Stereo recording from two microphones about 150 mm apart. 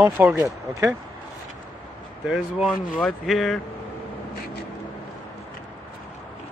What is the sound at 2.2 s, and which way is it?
Speech, 5° right (ahead or behind).